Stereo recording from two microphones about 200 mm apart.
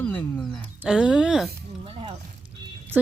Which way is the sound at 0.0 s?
10° left (ahead or behind).